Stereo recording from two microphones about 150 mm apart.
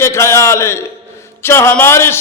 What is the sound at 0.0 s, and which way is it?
A man's voice, 20° left (ahead or behind).